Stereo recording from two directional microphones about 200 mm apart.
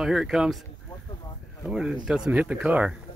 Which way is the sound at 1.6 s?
5° right (ahead or behind).